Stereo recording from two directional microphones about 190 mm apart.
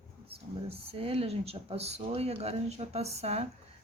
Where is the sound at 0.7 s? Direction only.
30° right (ahead or behind).